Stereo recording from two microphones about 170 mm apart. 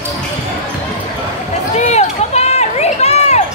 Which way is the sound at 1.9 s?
40° left (ahead or behind).